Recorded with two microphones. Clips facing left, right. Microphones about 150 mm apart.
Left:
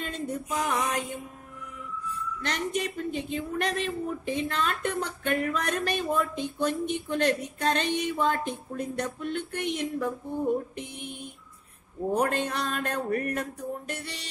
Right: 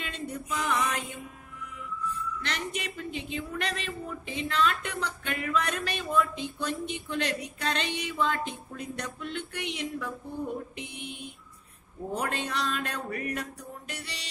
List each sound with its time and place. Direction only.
0.0 s speech: 45° left (ahead or behind)
2.4 s speech: 45° left (ahead or behind)